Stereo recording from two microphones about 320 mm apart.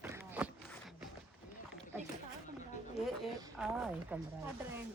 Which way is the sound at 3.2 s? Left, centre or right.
Centre.